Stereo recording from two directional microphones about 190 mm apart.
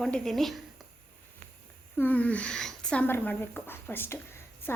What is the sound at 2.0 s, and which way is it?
A woman's voice, 10° left (ahead or behind).